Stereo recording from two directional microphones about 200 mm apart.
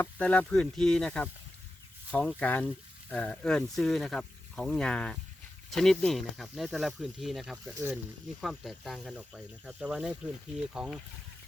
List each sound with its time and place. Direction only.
0.0 s speech: 5° left (ahead or behind)